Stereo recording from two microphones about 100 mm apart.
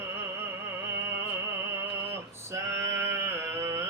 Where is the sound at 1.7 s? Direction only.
25° right (ahead or behind).